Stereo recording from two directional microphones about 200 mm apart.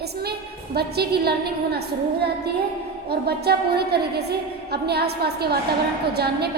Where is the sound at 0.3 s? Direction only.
55° right (ahead or behind).